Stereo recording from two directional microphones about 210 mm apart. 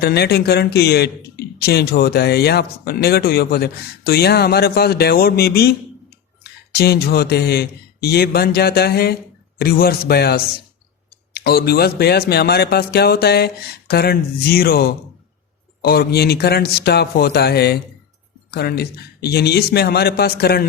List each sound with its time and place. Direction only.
0.0 s speech: 50° left (ahead or behind)